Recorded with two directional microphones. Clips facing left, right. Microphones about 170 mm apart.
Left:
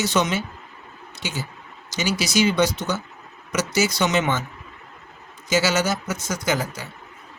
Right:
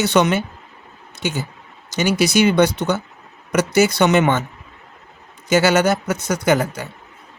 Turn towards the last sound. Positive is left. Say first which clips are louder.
# right 7 dB
turn(degrees=-60)  # may be behind; listen again after turning